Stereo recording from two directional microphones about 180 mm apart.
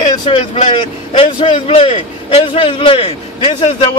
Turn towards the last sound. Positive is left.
turn(degrees=35)  # may be behind; listen again after turning